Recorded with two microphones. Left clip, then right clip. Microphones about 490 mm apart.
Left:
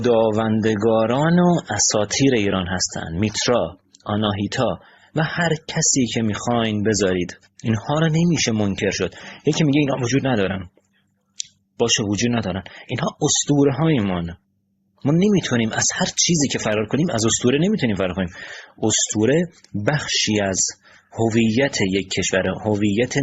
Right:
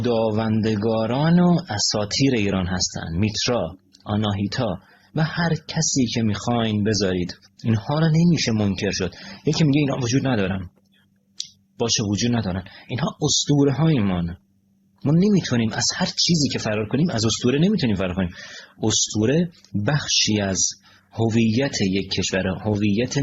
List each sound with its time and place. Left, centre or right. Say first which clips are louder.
0.0 s speech: left 4 dB; left
11.8 s speech: left 3 dB; left